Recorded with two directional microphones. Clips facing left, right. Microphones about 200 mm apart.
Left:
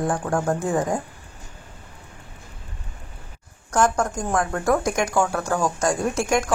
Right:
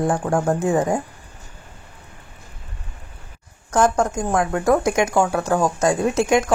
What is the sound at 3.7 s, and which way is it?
Speech, 20° right (ahead or behind).